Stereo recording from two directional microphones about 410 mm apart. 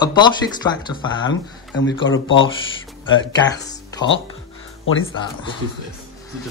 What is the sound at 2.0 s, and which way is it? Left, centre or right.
Speech, left.